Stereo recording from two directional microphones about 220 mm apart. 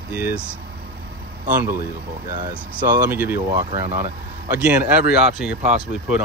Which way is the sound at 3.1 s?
10° right (ahead or behind).